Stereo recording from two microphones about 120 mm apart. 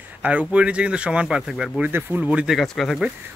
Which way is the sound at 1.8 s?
15° right (ahead or behind).